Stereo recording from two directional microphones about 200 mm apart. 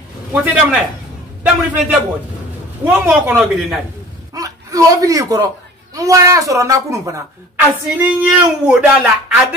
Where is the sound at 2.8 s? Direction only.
10° right (ahead or behind).